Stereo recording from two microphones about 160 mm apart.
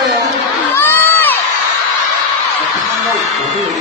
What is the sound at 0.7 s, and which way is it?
Crowd, 10° left (ahead or behind).